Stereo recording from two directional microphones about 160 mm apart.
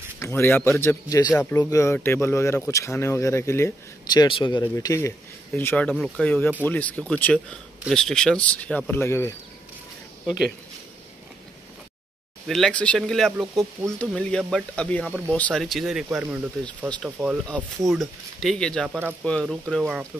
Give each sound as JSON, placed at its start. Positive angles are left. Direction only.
{"t": 0.2, "sound": "speech", "side_deg": 15}
{"t": 1.2, "sound": "speech", "side_deg": 0}
{"t": 1.5, "sound": "speech", "side_deg": 15}
{"t": 4.7, "sound": "speech", "side_deg": 20}
{"t": 10.2, "sound": "speech", "side_deg": -5}
{"t": 12.4, "sound": "speech", "side_deg": 5}
{"t": 16.1, "sound": "speech", "side_deg": -15}
{"t": 16.9, "sound": "speech", "side_deg": 0}
{"t": 18.9, "sound": "speech", "side_deg": -10}
{"t": 19.2, "sound": "speech", "side_deg": 5}